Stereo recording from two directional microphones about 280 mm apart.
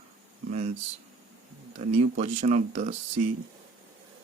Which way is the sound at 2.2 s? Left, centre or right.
Right.